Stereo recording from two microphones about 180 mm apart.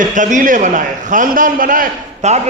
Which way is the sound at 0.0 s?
45° right (ahead or behind).